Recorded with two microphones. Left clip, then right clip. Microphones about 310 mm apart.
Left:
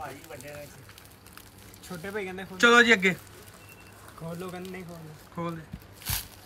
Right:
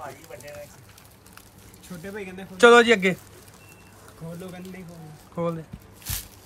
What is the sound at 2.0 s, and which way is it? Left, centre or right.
Speech, centre.